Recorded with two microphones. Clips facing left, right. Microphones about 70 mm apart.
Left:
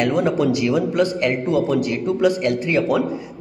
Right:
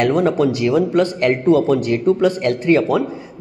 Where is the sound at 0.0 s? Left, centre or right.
Right.